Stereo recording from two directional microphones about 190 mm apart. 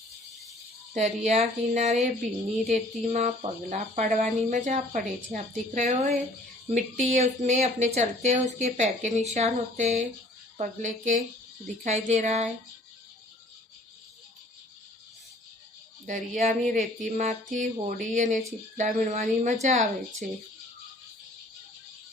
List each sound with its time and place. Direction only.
0.9 s speech: 35° right (ahead or behind)
16.0 s speech: 40° right (ahead or behind)